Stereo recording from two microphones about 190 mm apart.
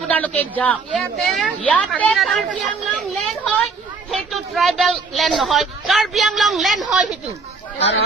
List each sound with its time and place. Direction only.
0.1 s a woman's voice: 10° left (ahead or behind)
4.1 s a woman's voice: centre (ahead or behind)
7.8 s speech: 70° left (ahead or behind)